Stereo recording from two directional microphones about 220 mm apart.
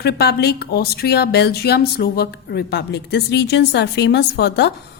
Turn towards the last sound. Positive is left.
turn(degrees=50)  # may be behind; listen again after turning